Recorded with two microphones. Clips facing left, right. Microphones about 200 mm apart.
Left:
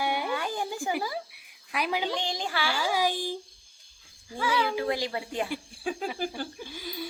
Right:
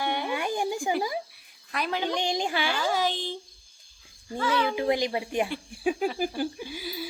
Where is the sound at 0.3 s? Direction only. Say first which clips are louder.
Right 3 dB; 15° right (ahead or behind).